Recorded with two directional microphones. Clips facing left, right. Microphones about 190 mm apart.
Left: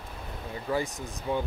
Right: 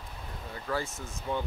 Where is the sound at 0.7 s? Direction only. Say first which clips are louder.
Left 4 dB; 15° left (ahead or behind).